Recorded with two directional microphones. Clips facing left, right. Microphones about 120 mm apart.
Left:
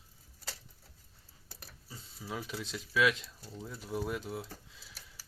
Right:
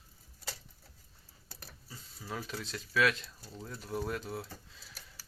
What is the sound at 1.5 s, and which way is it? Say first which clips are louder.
Speech: even; 10° left (ahead or behind).